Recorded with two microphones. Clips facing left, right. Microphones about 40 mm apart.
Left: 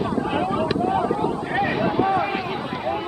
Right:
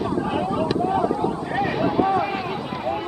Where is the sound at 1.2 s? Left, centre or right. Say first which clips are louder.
Left 1 dB; left.